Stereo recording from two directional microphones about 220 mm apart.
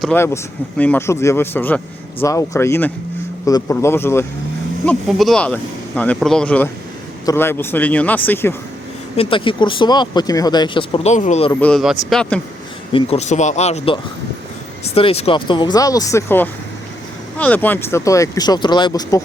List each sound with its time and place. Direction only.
0.0 s speech: 10° left (ahead or behind)
4.9 s speech: centre (ahead or behind)
9.1 s speech: 25° left (ahead or behind)
11.6 s speech: centre (ahead or behind)
12.9 s speech: 25° left (ahead or behind)